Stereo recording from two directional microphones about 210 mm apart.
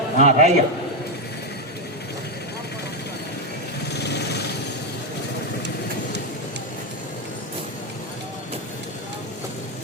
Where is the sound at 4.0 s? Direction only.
50° left (ahead or behind).